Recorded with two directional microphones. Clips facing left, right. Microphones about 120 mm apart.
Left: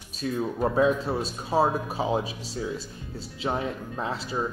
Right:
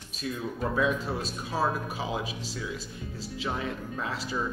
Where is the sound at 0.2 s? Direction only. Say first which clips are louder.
Left 5 dB; 35° left (ahead or behind).